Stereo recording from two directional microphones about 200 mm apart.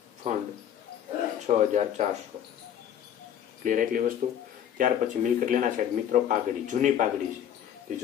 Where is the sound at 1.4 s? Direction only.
35° right (ahead or behind).